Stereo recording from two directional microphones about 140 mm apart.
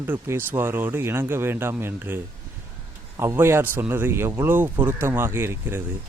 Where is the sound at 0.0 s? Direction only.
15° right (ahead or behind).